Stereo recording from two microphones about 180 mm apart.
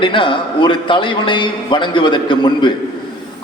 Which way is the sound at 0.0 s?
30° left (ahead or behind).